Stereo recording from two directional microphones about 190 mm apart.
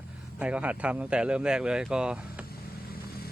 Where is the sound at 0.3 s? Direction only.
5° right (ahead or behind).